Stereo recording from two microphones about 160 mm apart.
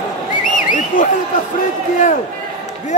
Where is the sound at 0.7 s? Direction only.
50° left (ahead or behind).